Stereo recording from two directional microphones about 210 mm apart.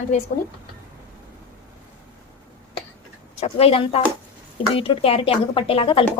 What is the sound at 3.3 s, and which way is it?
Speech, 30° left (ahead or behind).